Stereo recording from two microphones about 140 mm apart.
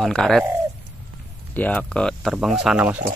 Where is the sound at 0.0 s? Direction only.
5° left (ahead or behind).